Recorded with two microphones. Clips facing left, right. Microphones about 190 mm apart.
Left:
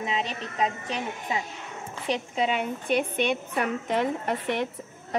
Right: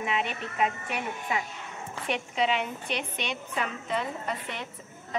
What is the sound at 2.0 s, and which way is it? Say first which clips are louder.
A woman's voice: left 1 dB; 40° left (ahead or behind).